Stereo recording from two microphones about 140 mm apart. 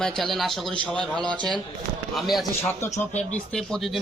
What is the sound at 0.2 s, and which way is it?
A man's voice, centre (ahead or behind).